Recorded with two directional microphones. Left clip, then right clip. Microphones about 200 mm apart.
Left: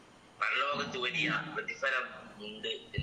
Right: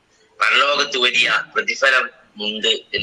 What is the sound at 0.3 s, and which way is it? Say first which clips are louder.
A man's voice: right 16 dB; 55° right (ahead or behind).